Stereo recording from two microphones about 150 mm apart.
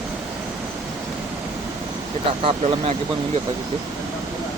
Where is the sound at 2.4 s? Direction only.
40° right (ahead or behind).